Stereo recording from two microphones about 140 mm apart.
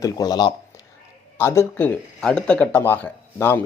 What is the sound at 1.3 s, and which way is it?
Speech, 20° left (ahead or behind).